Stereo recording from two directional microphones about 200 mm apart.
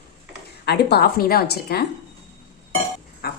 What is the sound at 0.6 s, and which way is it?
A woman's voice, 55° left (ahead or behind).